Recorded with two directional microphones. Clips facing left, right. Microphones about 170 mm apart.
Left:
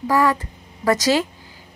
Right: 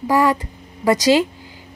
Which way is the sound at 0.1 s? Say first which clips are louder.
Right 2 dB; 15° right (ahead or behind).